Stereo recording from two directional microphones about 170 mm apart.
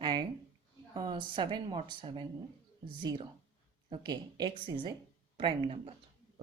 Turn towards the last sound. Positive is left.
turn(degrees=-30)  # may be behind; listen again after turning